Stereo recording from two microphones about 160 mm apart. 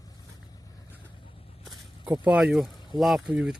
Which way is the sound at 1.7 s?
25° right (ahead or behind).